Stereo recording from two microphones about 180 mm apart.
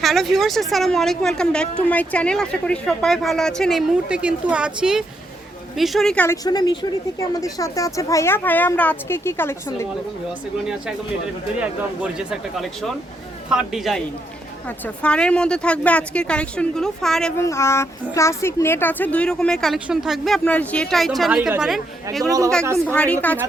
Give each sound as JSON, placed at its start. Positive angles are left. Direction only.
{"t": 0.0, "sound": "speech", "side_deg": 0}
{"t": 6.2, "sound": "speech", "side_deg": 20}
{"t": 11.9, "sound": "speech", "side_deg": -5}
{"t": 15.0, "sound": "speech", "side_deg": 5}
{"t": 17.3, "sound": "speech", "side_deg": 15}
{"t": 22.9, "sound": "speech", "side_deg": 10}